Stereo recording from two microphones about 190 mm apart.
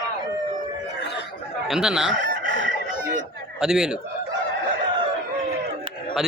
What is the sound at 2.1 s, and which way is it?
Chicken, 70° right (ahead or behind).